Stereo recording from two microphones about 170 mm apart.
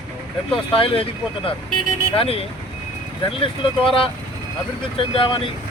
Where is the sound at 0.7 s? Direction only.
35° left (ahead or behind).